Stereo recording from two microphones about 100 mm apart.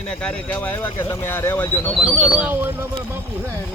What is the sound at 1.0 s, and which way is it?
Speech, 35° left (ahead or behind).